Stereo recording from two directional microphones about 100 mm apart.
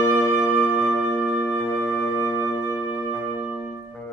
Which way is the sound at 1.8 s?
25° left (ahead or behind).